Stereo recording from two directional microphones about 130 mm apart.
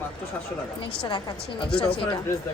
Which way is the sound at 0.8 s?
40° left (ahead or behind).